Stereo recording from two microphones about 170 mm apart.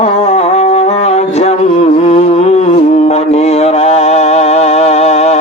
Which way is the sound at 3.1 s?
40° left (ahead or behind).